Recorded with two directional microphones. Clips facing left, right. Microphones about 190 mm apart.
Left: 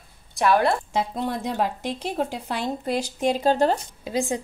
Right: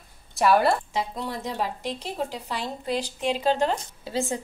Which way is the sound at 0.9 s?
50° left (ahead or behind).